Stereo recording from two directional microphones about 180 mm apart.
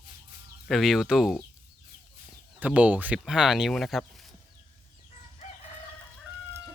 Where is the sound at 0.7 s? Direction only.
Centre (ahead or behind).